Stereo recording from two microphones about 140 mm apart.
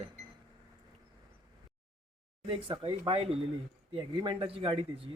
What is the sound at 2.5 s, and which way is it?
Speech, 40° right (ahead or behind).